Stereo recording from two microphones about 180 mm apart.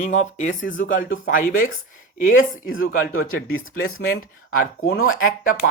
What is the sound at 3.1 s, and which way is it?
Speech, 50° left (ahead or behind).